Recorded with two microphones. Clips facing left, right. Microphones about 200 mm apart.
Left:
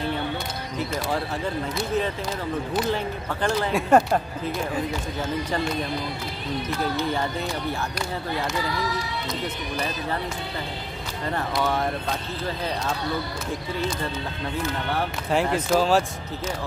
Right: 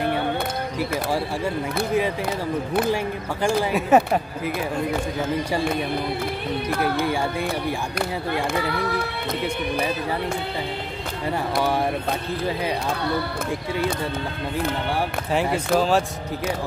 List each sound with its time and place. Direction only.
3.4 s speech: 5° right (ahead or behind)
6.5 s music: 60° right (ahead or behind)
8.5 s music: 60° right (ahead or behind)
11.6 s speech: 10° right (ahead or behind)
15.4 s speech: 5° right (ahead or behind)